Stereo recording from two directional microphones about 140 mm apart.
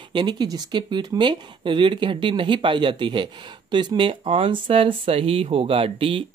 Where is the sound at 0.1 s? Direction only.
30° right (ahead or behind).